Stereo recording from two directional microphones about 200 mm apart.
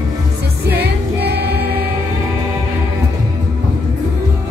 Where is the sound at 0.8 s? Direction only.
55° right (ahead or behind).